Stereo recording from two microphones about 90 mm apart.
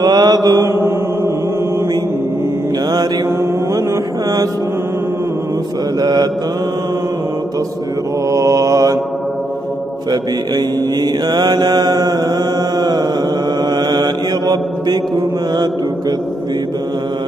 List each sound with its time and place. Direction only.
0.0 s mantra: 50° right (ahead or behind)
0.7 s mantra: 30° right (ahead or behind)
5.9 s mantra: 45° right (ahead or behind)
8.3 s mantra: 35° right (ahead or behind)
10.5 s mantra: 50° right (ahead or behind)